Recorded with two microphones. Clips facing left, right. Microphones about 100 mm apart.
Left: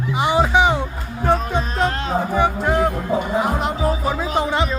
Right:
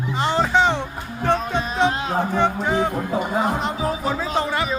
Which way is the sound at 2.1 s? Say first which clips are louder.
Left 1 dB; 5° left (ahead or behind).